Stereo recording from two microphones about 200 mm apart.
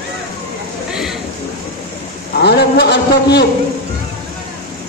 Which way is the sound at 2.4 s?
55° left (ahead or behind).